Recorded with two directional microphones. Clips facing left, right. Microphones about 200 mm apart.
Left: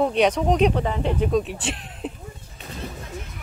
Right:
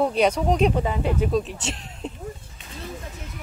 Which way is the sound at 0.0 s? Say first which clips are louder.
Left 1 dB; centre (ahead or behind).